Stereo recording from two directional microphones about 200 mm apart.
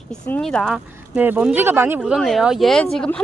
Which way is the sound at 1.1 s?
10° right (ahead or behind).